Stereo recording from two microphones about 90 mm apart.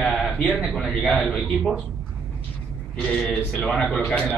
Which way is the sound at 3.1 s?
15° left (ahead or behind).